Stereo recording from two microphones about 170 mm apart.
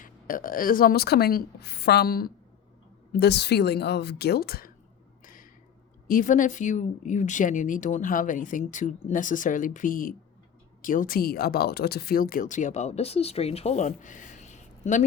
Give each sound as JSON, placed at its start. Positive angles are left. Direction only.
{"t": 0.0, "sound": "a woman's voice", "side_deg": 55}
{"t": 3.1, "sound": "speech", "side_deg": 75}
{"t": 5.2, "sound": "a sound", "side_deg": 55}
{"t": 6.1, "sound": "speech", "side_deg": 50}